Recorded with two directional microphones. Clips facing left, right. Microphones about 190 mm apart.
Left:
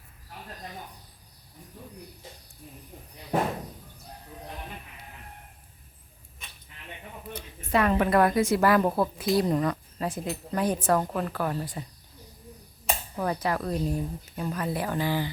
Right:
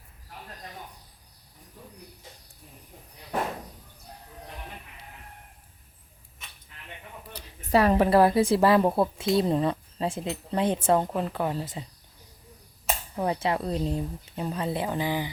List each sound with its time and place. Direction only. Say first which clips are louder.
7.3 s a woman's voice: right 3 dB; 35° right (ahead or behind)
13.1 s a woman's voice: right 2 dB; 25° right (ahead or behind)